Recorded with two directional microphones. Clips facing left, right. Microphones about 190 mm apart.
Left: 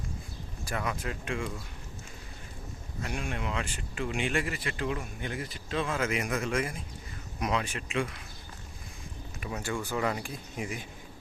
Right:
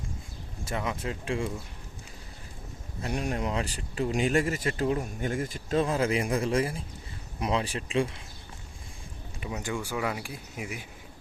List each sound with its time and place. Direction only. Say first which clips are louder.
0.6 s speech: right 2 dB; 25° right (ahead or behind)
3.0 s speech: right 5 dB; 35° right (ahead or behind)
9.5 s speech: right 1 dB; 15° right (ahead or behind)